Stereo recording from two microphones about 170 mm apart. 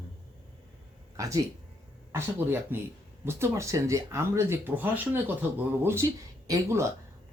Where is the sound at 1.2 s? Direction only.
20° right (ahead or behind).